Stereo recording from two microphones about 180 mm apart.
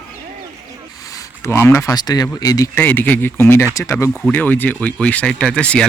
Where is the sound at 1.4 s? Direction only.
15° left (ahead or behind).